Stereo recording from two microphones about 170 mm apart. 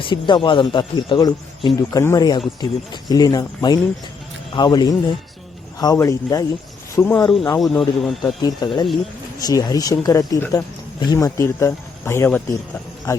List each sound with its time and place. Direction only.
0.0 s speech: 30° left (ahead or behind)
7.6 s speech: centre (ahead or behind)
8.4 s speech: 25° left (ahead or behind)